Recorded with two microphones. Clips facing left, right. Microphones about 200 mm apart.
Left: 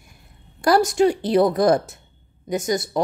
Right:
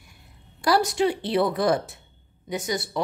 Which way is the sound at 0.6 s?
45° left (ahead or behind).